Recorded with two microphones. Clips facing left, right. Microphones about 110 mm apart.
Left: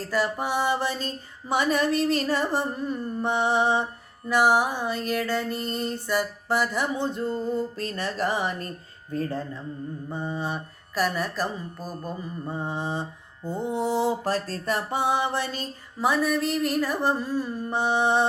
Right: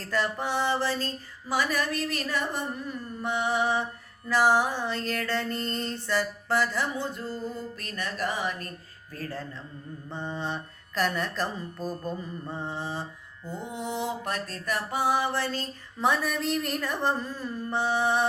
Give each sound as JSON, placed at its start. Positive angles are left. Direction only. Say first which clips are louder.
{"t": 0.1, "sound": "mantra", "louder": "left 2 dB", "side_deg": 10}
{"t": 4.3, "sound": "music", "louder": "left 2 dB", "side_deg": 15}
{"t": 9.1, "sound": "mantra", "louder": "left 7 dB", "side_deg": 20}
{"t": 10.1, "sound": "mantra", "louder": "left 2 dB", "side_deg": 10}
{"t": 16.0, "sound": "music", "louder": "left 3 dB", "side_deg": 5}